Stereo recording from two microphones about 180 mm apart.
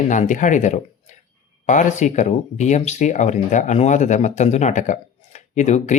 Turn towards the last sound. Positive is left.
turn(degrees=40)  # may be behind; listen again after turning